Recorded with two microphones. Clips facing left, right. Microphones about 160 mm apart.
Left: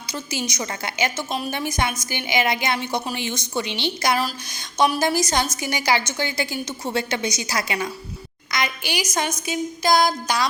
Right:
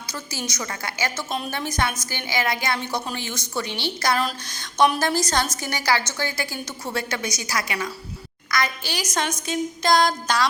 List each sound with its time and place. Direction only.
0.1 s a woman's voice: 15° left (ahead or behind)